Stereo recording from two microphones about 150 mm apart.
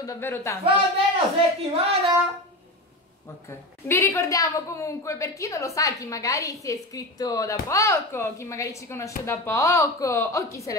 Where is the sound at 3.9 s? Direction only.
20° left (ahead or behind).